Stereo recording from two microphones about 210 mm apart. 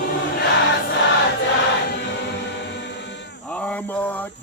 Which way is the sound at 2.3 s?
55° left (ahead or behind).